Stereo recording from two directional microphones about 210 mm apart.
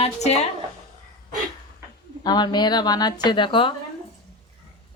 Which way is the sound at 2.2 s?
20° left (ahead or behind).